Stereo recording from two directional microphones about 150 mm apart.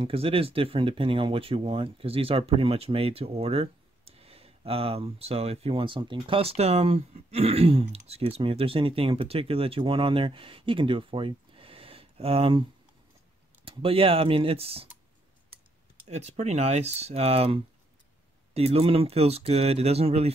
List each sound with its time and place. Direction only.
0.0 s speech: 40° right (ahead or behind)
13.7 s speech: 40° right (ahead or behind)
16.1 s speech: 50° right (ahead or behind)